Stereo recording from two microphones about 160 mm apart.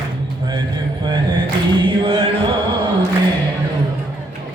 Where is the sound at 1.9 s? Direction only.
35° right (ahead or behind).